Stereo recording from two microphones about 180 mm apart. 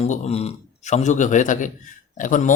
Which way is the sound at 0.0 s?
35° left (ahead or behind).